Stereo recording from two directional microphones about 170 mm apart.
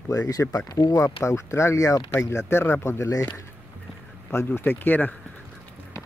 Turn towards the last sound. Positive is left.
turn(degrees=10)  # may be behind; listen again after turning